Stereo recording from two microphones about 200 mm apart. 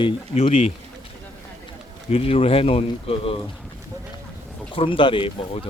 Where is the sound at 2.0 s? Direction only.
30° left (ahead or behind).